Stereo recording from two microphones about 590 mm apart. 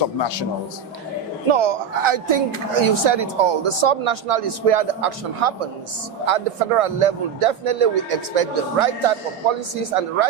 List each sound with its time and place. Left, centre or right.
0.2 s a man's voice: left
1.5 s speech: right